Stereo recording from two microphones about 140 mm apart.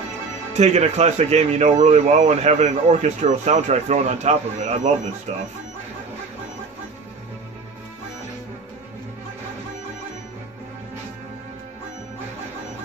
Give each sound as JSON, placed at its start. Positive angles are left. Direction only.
{"t": 0.5, "sound": "speech", "side_deg": -50}